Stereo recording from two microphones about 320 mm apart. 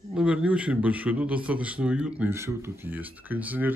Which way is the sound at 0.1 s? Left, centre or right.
Centre.